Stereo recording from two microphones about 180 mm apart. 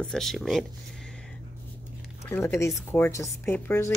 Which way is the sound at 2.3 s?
15° left (ahead or behind).